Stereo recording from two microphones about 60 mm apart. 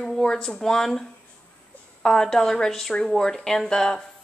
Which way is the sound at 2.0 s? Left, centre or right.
Centre.